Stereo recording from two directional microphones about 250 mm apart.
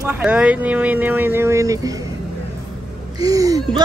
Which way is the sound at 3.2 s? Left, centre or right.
Centre.